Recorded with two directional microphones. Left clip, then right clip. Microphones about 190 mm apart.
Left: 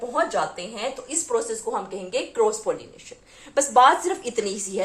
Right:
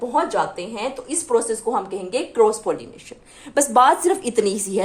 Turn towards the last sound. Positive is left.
turn(degrees=-60)  # may be behind; listen again after turning